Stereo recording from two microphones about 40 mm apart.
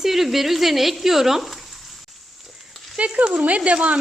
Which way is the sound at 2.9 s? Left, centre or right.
Right.